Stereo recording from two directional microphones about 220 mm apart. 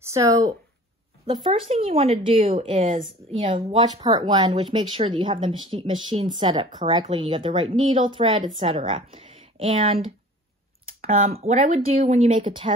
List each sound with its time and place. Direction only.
0.0 s speech: 15° right (ahead or behind)